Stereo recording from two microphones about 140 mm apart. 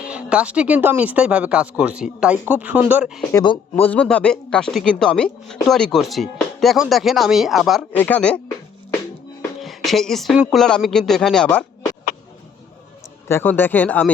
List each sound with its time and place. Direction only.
0.0 s speech: 10° right (ahead or behind)
3.3 s speech: 35° left (ahead or behind)
3.8 s speech: 10° left (ahead or behind)
7.9 s speech: 10° left (ahead or behind)
9.6 s speech: centre (ahead or behind)
13.2 s speech: 15° left (ahead or behind)